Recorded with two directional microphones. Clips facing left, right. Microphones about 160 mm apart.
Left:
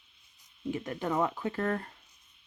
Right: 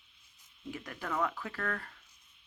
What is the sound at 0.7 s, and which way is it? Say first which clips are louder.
Speech: left 6 dB; 25° left (ahead or behind).